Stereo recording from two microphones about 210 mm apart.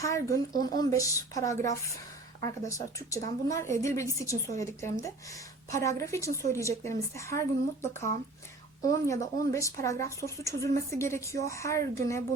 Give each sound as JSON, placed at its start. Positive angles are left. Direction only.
{"t": 0.0, "sound": "speech", "side_deg": 15}